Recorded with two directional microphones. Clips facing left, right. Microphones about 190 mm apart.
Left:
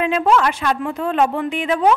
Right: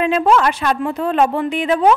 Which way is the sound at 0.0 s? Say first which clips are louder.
Right 2 dB; 35° right (ahead or behind).